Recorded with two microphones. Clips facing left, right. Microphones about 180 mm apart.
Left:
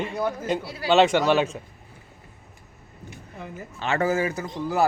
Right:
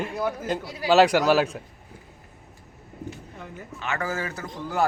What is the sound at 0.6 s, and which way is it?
Speech, 15° right (ahead or behind).